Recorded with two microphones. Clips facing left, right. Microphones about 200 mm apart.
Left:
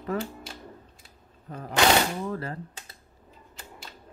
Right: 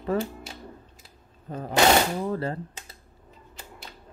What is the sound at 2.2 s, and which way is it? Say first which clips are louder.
Mechanisms: right 4 dB; 30° right (ahead or behind).